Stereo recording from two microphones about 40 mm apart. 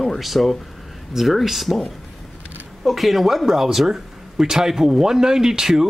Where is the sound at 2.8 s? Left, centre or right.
Centre.